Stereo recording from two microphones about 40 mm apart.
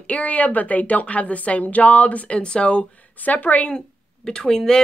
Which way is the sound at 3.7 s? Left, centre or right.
Left.